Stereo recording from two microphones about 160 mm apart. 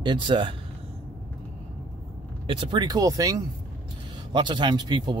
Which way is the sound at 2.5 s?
30° right (ahead or behind).